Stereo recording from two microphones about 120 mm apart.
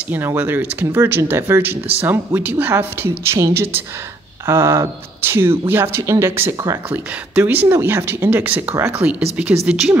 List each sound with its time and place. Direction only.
0.1 s speech: 20° right (ahead or behind)